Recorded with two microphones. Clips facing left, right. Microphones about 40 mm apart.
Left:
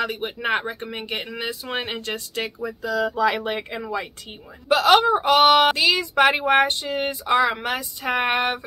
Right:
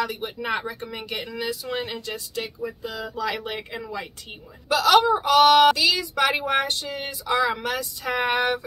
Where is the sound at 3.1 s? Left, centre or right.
Left.